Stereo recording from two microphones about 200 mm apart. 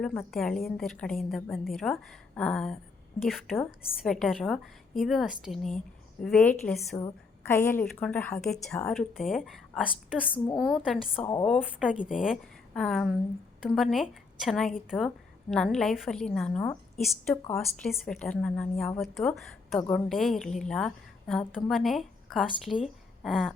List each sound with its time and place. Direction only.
0.0 s a woman's voice: centre (ahead or behind)
11.2 s a woman's voice: 20° left (ahead or behind)
11.4 s a woman's voice: centre (ahead or behind)